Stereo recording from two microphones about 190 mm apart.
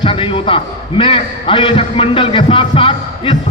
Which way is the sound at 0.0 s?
25° left (ahead or behind).